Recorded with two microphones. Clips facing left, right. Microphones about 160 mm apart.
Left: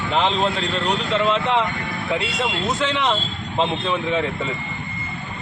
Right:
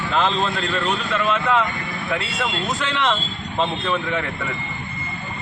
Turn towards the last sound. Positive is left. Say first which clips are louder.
# left 3 dB
turn(degrees=20)  # may be behind; listen again after turning